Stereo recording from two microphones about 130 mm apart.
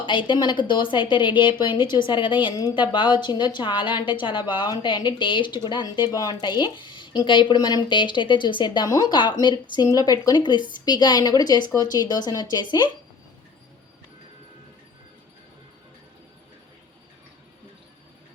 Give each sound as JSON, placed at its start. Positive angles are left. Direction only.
{"t": 0.0, "sound": "a woman's voice", "side_deg": 40}